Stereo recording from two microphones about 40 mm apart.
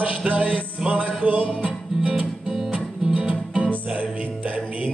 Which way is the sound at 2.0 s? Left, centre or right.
Right.